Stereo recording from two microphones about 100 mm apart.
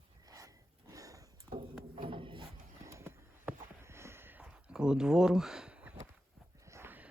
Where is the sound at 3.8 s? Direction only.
25° right (ahead or behind).